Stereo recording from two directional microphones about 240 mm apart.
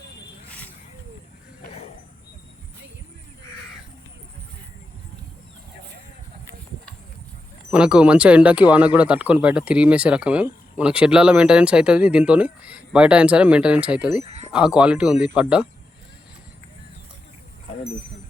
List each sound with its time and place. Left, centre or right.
7.7 s speech: centre
14.3 s a sound: right
14.5 s speech: centre